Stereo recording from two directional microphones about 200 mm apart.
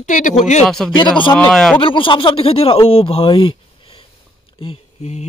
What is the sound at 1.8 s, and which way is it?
Speech, 25° left (ahead or behind).